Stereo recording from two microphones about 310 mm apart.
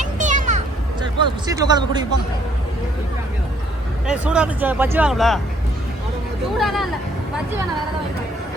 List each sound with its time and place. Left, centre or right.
0.0 s children playing: right
1.2 s speech: centre
4.0 s speech: centre
6.6 s speech: centre